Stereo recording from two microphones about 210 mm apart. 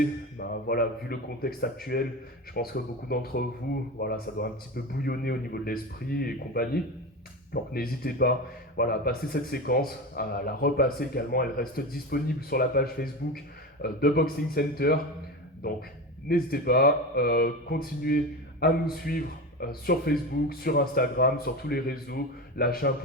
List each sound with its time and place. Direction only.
0.0 s a man's voice: 45° left (ahead or behind)
16.3 s a man's voice: 45° left (ahead or behind)